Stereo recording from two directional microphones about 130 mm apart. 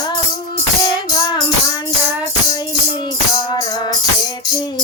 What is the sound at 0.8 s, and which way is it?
Music, 35° left (ahead or behind).